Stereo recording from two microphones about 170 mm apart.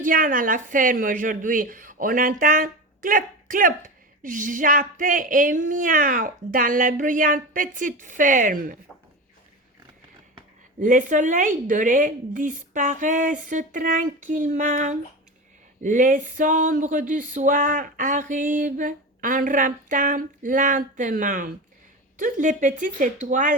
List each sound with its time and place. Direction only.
0.0 s a woman's voice: 50° right (ahead or behind)
10.8 s a woman's voice: 50° right (ahead or behind)